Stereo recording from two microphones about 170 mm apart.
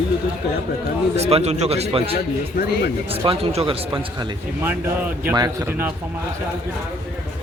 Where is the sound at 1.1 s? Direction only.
35° right (ahead or behind).